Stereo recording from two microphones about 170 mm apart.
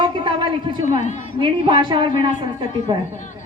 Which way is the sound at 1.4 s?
30° right (ahead or behind).